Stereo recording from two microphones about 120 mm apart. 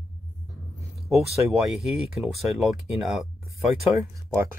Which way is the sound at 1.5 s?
Centre (ahead or behind).